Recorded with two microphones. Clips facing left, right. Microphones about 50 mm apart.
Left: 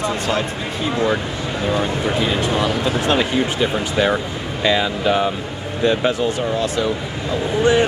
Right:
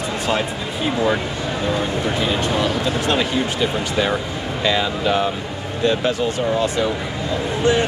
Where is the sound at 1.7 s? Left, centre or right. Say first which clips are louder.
Left 4 dB; centre.